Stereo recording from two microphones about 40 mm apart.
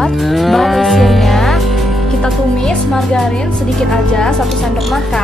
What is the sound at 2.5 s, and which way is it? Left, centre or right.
Speech, centre.